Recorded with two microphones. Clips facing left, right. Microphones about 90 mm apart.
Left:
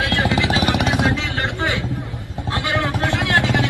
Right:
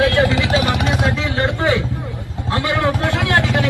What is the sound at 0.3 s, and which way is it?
Vehicle, 20° left (ahead or behind).